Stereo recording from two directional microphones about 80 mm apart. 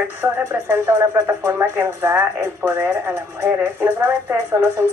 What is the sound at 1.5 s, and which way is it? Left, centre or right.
Speech, right.